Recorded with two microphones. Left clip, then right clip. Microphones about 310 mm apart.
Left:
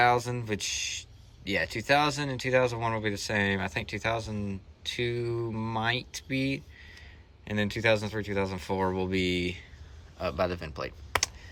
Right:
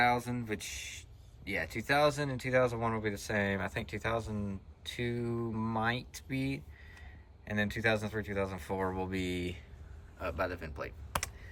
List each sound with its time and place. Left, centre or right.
0.3 s speech: centre